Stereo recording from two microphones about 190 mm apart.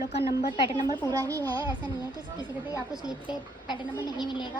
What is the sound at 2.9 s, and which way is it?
A woman's voice, 20° left (ahead or behind).